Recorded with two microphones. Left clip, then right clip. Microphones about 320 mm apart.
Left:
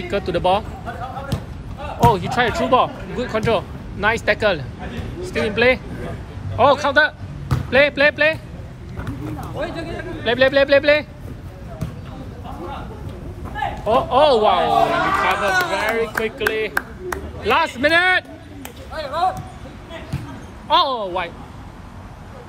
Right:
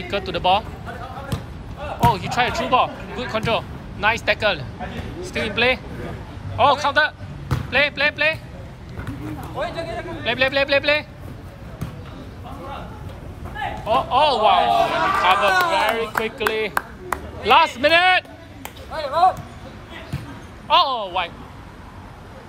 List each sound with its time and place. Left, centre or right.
0.1 s a man's voice: centre
1.3 s basketball bounce: centre
2.0 s speech: centre
9.6 s a sound: right
10.2 s a man's voice: centre
13.8 s a man's voice: centre
15.2 s speech: centre
20.6 s a man's voice: centre